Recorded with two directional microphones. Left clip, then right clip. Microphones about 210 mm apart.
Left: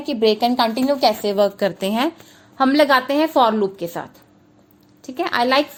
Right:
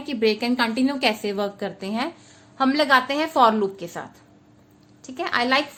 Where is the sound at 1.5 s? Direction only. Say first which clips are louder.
Left 8 dB; 35° left (ahead or behind).